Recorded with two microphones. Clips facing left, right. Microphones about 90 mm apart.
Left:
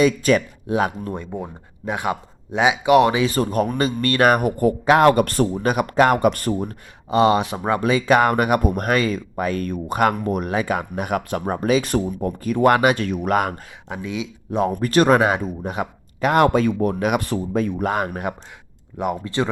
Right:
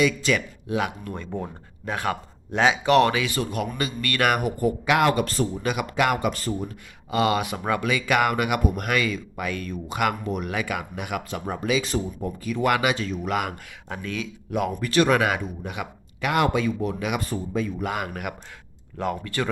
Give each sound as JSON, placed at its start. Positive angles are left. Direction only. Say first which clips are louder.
{"t": 0.0, "sound": "speech", "louder": "left 5 dB", "side_deg": 40}
{"t": 1.1, "sound": "speech", "louder": "left 3 dB", "side_deg": 15}
{"t": 3.2, "sound": "speech", "louder": "left 7 dB", "side_deg": 40}
{"t": 4.4, "sound": "speech", "louder": "left 5 dB", "side_deg": 55}
{"t": 4.9, "sound": "speech", "louder": "left 7 dB", "side_deg": 40}
{"t": 5.7, "sound": "speech", "louder": "left 7 dB", "side_deg": 40}
{"t": 6.1, "sound": "speech", "louder": "left 7 dB", "side_deg": 55}
{"t": 7.1, "sound": "speech", "louder": "left 6 dB", "side_deg": 30}
{"t": 11.2, "sound": "speech", "louder": "left 6 dB", "side_deg": 50}
{"t": 13.8, "sound": "speech", "louder": "left 4 dB", "side_deg": 15}
{"t": 14.7, "sound": "speech", "louder": "left 5 dB", "side_deg": 40}
{"t": 18.9, "sound": "speech", "louder": "left 4 dB", "side_deg": 20}